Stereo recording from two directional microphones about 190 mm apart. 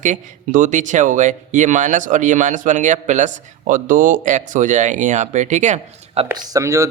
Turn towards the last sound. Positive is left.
turn(degrees=-15)  # may be behind; listen again after turning